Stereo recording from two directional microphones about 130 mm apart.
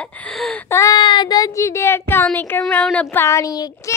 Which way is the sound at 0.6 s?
25° left (ahead or behind).